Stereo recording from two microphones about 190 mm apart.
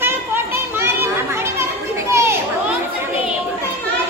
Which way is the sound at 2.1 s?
15° right (ahead or behind).